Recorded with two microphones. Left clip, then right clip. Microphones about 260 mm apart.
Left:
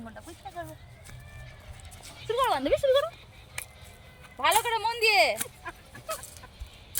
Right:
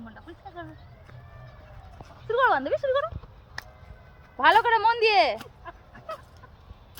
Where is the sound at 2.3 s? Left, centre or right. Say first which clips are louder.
Right 3 dB; left.